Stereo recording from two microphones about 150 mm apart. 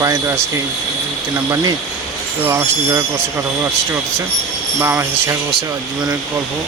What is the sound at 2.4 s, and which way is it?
Speech, 15° right (ahead or behind).